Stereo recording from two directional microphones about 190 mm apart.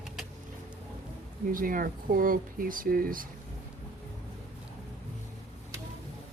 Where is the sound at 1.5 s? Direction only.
45° right (ahead or behind).